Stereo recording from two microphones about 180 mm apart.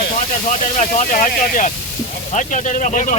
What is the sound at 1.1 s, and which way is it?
Speech, 45° left (ahead or behind).